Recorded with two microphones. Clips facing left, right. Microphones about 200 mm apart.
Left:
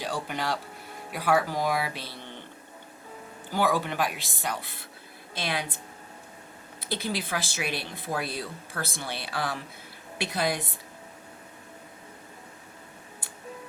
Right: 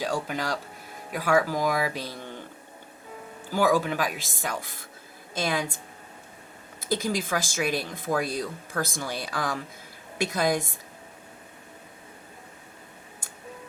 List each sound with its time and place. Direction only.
0.0 s speech: 45° right (ahead or behind)
3.5 s speech: 45° right (ahead or behind)